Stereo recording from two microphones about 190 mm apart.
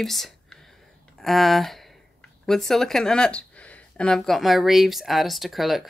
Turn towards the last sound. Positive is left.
turn(degrees=0)  # may be behind; listen again after turning